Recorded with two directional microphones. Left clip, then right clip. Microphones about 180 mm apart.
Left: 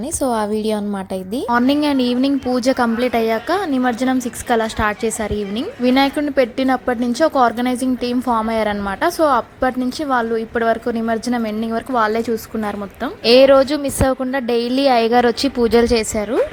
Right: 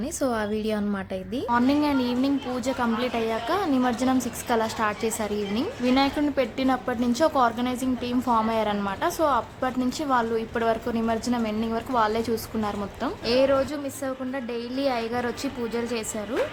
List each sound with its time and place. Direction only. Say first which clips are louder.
0.2 s a woman's voice: left 8 dB; 20° left (ahead or behind)
13.2 s a woman's voice: left 12 dB; 35° left (ahead or behind)